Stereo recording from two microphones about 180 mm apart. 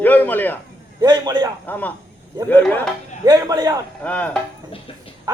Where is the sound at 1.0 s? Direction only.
20° right (ahead or behind).